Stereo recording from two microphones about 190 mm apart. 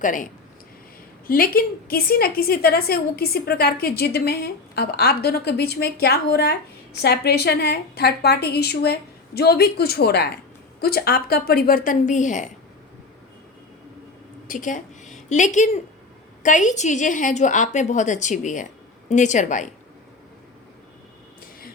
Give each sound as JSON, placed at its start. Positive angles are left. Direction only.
{"t": 0.0, "sound": "a woman's voice", "side_deg": 45}
{"t": 1.3, "sound": "a woman's voice", "side_deg": 50}
{"t": 14.4, "sound": "a woman's voice", "side_deg": 45}